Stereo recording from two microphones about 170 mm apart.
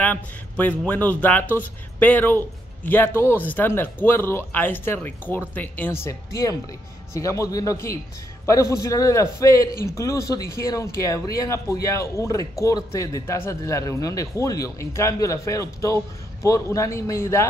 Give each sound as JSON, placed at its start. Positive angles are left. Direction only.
{"t": 0.0, "sound": "a man's voice", "side_deg": 10}